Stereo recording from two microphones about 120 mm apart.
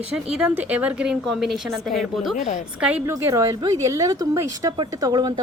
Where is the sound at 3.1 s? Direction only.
25° right (ahead or behind).